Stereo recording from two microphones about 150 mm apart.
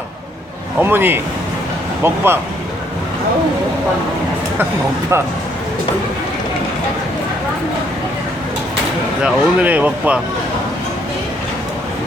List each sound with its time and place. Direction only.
0.8 s speech: 15° right (ahead or behind)
9.2 s speech: 10° right (ahead or behind)